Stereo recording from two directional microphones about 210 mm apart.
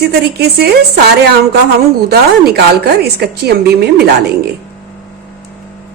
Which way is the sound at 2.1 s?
50° right (ahead or behind).